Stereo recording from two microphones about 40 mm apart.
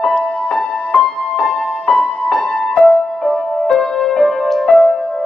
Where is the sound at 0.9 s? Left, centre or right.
Left.